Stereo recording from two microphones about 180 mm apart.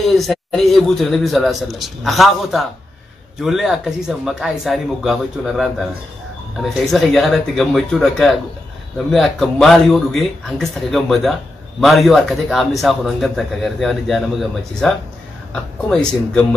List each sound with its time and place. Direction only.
0.2 s a man's voice: centre (ahead or behind)